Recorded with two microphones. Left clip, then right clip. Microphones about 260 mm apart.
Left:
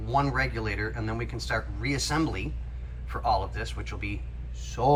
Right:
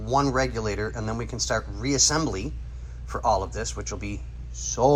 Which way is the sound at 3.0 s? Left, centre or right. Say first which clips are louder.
Right 3 dB; centre.